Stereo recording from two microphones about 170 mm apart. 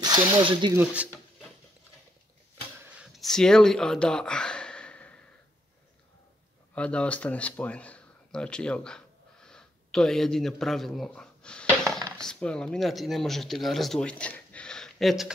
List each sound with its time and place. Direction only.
0.0 s speech: 25° right (ahead or behind)
0.7 s speech: 10° right (ahead or behind)
2.9 s a sound: centre (ahead or behind)
6.7 s speech: 5° left (ahead or behind)
11.1 s dishes: 5° left (ahead or behind)
12.2 s speech: 5° left (ahead or behind)